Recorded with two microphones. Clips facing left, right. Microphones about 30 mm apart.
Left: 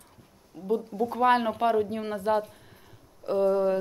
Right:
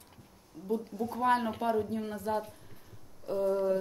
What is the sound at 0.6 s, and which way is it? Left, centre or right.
Speech, left.